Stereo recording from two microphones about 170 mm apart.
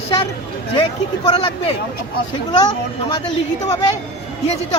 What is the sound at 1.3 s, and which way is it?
Speech, 35° left (ahead or behind).